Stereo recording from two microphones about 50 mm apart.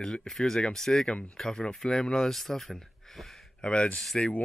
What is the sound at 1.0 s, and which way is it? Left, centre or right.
Speech, left.